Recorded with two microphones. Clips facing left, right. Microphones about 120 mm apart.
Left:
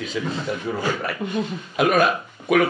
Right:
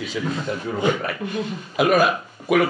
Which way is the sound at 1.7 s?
Centre (ahead or behind).